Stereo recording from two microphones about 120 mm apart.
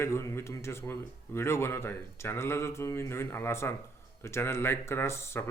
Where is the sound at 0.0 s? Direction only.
25° left (ahead or behind).